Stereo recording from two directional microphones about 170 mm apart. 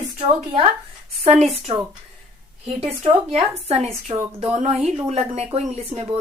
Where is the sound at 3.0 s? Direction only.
35° right (ahead or behind).